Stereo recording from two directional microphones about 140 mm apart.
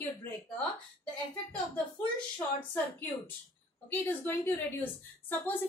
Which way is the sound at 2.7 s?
10° left (ahead or behind).